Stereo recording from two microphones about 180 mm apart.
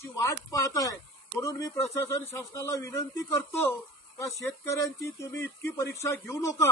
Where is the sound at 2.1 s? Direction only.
15° left (ahead or behind).